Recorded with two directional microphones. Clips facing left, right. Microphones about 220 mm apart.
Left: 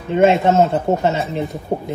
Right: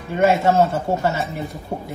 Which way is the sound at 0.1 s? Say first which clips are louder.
Left 3 dB; 25° left (ahead or behind).